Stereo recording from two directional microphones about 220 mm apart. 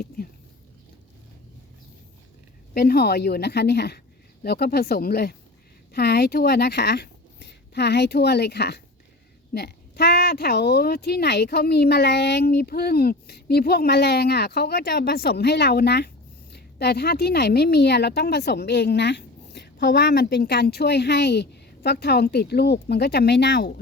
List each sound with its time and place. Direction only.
2.7 s a woman's voice: 45° left (ahead or behind)